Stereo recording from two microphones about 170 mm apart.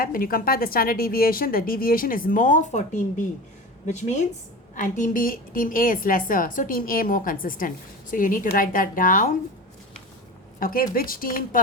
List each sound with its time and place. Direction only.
0.0 s a woman's voice: 55° left (ahead or behind)
10.6 s a woman's voice: 55° left (ahead or behind)